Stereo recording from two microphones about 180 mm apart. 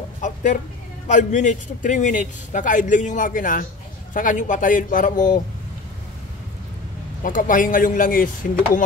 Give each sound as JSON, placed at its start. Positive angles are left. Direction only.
{"t": 0.2, "sound": "a sound", "side_deg": 45}
{"t": 1.0, "sound": "a man's voice", "side_deg": 40}
{"t": 7.2, "sound": "a man's voice", "side_deg": 50}